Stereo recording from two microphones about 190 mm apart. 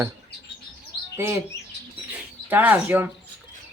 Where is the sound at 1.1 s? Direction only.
15° right (ahead or behind).